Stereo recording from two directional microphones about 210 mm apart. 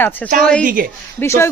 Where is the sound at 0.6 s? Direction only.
40° right (ahead or behind).